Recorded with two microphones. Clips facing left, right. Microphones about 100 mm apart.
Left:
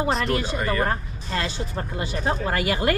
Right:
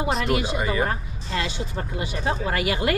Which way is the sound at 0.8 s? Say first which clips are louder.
Left 1 dB; 40° left (ahead or behind).